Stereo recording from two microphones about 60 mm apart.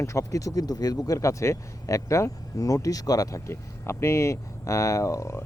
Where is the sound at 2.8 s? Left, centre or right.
Left.